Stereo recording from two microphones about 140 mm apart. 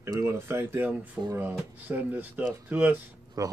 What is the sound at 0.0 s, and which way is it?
Speech, 20° right (ahead or behind).